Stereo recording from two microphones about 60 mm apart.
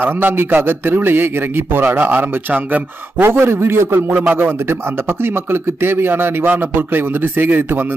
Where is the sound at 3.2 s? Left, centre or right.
Right.